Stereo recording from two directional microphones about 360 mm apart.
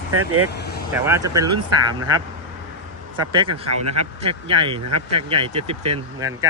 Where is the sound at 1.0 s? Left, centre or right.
Centre.